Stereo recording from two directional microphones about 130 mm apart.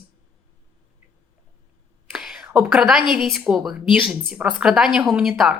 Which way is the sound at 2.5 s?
5° right (ahead or behind).